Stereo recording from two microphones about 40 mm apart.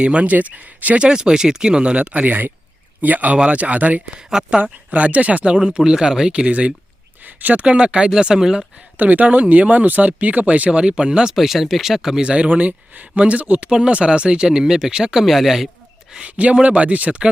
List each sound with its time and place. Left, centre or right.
0.0 s speech: right
0.9 s speech: right
3.3 s speech: right
5.5 s speech: right
7.3 s speech: right
7.6 s speech: right
8.1 s speech: centre
9.0 s speech: right
10.7 s speech: right
11.3 s speech: centre
12.2 s speech: right
15.2 s speech: centre
16.2 s speech: right